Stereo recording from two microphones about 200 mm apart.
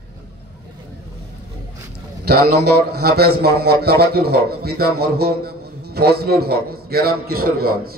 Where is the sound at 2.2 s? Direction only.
50° right (ahead or behind).